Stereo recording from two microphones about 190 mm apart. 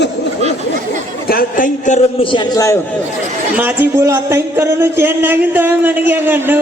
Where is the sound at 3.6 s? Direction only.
15° right (ahead or behind).